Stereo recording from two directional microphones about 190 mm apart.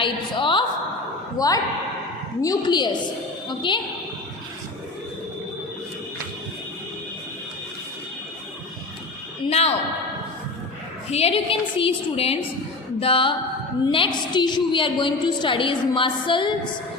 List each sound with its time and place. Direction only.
0.0 s a woman's voice: 25° left (ahead or behind)
9.5 s a woman's voice: 35° left (ahead or behind)
11.1 s a woman's voice: 30° left (ahead or behind)